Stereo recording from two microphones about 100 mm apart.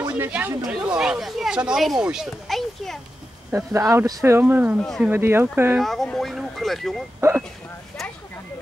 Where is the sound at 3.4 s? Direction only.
25° right (ahead or behind).